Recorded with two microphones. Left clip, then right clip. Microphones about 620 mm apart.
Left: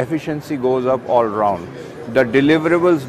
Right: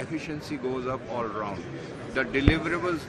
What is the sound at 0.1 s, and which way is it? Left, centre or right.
Speech, left.